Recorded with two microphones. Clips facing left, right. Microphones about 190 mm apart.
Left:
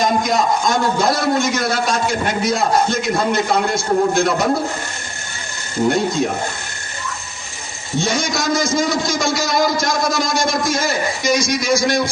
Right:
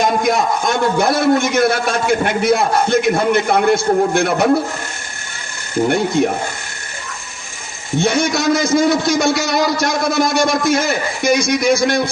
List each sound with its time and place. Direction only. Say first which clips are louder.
0.2 s a man's voice: right 1 dB; 60° right (ahead or behind)
7.9 s a man's voice: right 4 dB; 60° right (ahead or behind)